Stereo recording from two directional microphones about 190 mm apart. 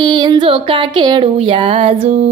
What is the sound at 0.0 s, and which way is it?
Speech, 20° right (ahead or behind).